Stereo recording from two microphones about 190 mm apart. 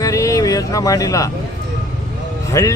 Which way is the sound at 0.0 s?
15° left (ahead or behind).